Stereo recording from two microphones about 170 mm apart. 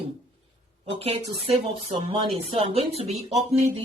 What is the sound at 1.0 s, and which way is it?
Speech, 35° right (ahead or behind).